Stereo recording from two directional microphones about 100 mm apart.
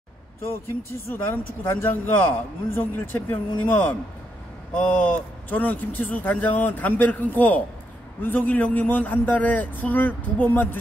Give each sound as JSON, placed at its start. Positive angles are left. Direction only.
{"t": 0.7, "sound": "speech", "side_deg": 30}